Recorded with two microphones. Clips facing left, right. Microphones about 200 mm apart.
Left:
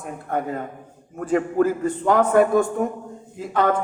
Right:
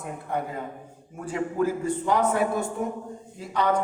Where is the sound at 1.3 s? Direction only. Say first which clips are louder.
Left 6 dB; 55° left (ahead or behind).